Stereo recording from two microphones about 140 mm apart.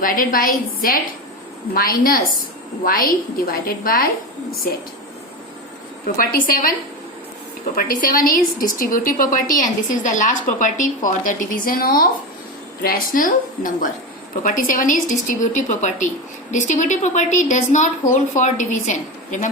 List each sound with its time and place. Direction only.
0.0 s a woman's voice: 80° left
6.1 s a woman's voice: 85° left
7.8 s a woman's voice: 90° left; by 19.5 s 65° left (ahead or behind)